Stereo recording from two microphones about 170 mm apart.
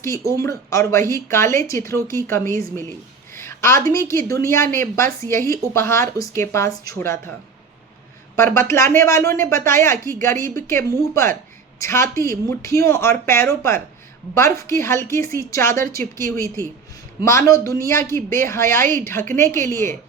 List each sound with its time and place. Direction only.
0.0 s speech: 15° left (ahead or behind)
3.3 s a sound: 15° left (ahead or behind)
3.8 s speech: 15° left (ahead or behind)
8.4 s speech: 15° left (ahead or behind)